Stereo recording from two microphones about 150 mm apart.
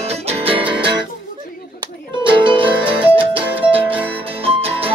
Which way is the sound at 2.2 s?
35° right (ahead or behind).